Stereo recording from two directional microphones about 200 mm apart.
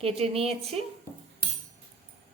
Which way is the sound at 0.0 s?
30° right (ahead or behind).